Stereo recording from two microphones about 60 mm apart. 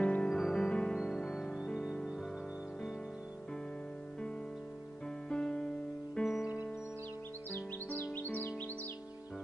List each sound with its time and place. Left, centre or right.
0.0 s music: centre
5.3 s music: centre
8.1 s music: left